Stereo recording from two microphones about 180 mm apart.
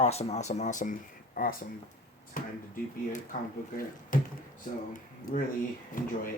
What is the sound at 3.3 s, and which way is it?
Speech, 50° left (ahead or behind).